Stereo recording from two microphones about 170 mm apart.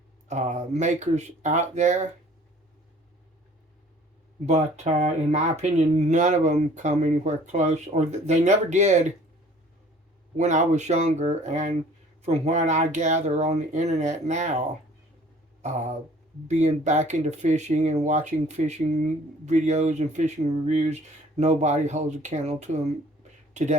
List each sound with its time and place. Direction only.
0.3 s speech: 45° right (ahead or behind)
4.4 s speech: 40° right (ahead or behind)
10.3 s speech: 45° right (ahead or behind)
15.6 s speech: 45° right (ahead or behind)